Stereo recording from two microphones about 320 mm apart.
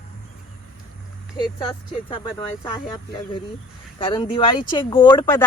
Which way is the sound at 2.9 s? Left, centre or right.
Centre.